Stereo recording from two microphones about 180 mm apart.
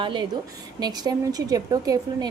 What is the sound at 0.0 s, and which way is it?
A woman's voice, 25° right (ahead or behind).